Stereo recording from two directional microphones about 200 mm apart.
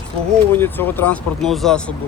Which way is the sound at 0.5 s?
10° left (ahead or behind).